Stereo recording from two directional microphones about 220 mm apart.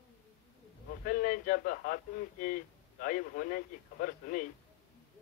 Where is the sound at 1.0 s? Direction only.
40° left (ahead or behind).